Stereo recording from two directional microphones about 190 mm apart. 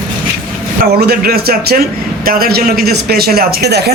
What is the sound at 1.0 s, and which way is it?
Speech, 55° right (ahead or behind).